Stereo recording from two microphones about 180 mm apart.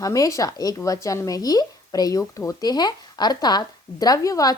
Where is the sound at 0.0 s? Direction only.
20° left (ahead or behind).